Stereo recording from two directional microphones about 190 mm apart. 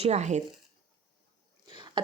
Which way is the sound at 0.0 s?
35° right (ahead or behind).